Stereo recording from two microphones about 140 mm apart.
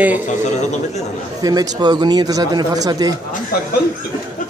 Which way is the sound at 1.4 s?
25° right (ahead or behind).